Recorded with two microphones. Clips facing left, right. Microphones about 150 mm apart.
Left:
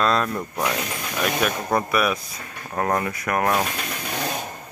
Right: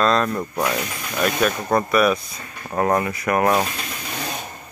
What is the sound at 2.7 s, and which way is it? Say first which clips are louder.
Speech: right 4 dB; 10° right (ahead or behind).